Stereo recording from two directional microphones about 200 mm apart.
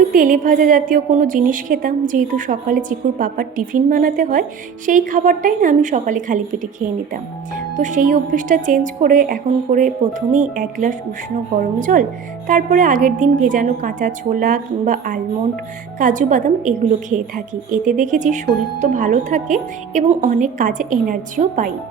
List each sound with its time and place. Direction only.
0.1 s a woman's voice: 45° right (ahead or behind)